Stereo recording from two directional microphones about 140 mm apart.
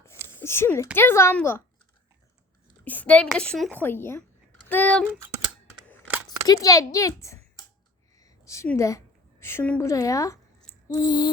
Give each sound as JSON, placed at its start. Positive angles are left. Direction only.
{"t": 0.3, "sound": "a woman's voice", "side_deg": 15}
{"t": 2.8, "sound": "a woman's voice", "side_deg": 10}
{"t": 6.2, "sound": "a child's voice", "side_deg": 25}
{"t": 8.1, "sound": "a sound", "side_deg": 25}
{"t": 8.6, "sound": "a woman's voice", "side_deg": 20}
{"t": 10.8, "sound": "owl", "side_deg": 30}